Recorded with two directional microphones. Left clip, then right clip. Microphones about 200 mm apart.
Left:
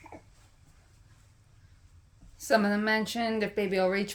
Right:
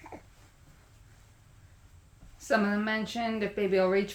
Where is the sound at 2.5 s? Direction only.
40° left (ahead or behind).